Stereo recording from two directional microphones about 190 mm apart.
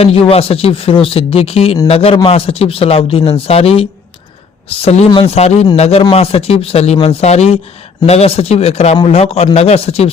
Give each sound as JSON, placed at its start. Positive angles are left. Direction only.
{"t": 0.0, "sound": "speech", "side_deg": 30}